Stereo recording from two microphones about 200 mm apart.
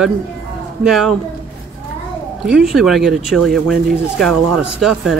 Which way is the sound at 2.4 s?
5° right (ahead or behind).